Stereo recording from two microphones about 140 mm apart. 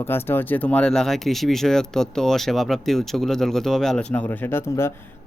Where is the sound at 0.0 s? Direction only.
15° left (ahead or behind).